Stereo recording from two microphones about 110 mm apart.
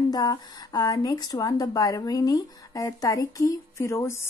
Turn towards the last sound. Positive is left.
turn(degrees=25)  # may be behind; listen again after turning